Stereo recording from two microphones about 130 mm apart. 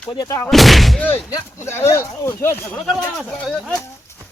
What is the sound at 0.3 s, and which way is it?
Speech, 20° left (ahead or behind).